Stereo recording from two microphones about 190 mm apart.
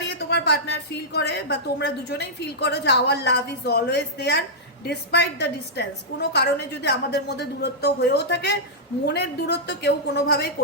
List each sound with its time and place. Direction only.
0.2 s a woman's voice: 60° left (ahead or behind)